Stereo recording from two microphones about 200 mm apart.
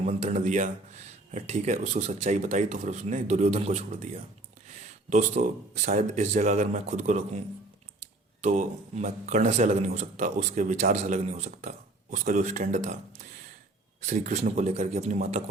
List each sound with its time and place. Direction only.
0.0 s speech: 35° right (ahead or behind)
5.0 s speech: 35° right (ahead or behind)
14.1 s speech: 35° right (ahead or behind)